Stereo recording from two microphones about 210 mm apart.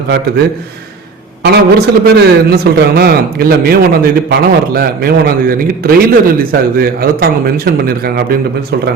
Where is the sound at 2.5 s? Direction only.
50° right (ahead or behind).